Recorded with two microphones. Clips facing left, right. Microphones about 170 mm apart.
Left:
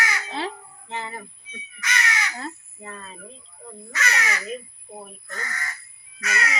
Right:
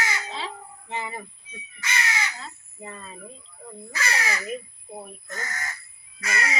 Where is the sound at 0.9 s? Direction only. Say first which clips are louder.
Even; 15° right (ahead or behind).